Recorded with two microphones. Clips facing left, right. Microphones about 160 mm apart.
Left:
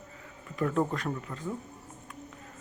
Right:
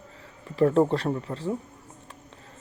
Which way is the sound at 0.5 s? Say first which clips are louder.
Right 8 dB; 30° right (ahead or behind).